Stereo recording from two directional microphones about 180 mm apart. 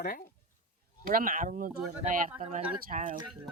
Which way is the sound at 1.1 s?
50° right (ahead or behind).